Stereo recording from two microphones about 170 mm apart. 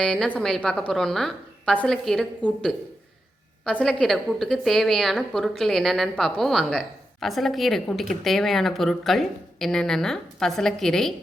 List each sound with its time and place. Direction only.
0.0 s a woman's voice: 5° left (ahead or behind)